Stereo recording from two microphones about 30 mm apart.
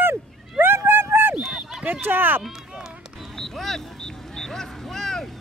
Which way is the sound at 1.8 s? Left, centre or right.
Right.